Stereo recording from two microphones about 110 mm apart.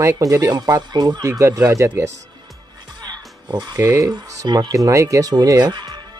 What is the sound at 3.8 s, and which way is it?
Speech, 30° right (ahead or behind).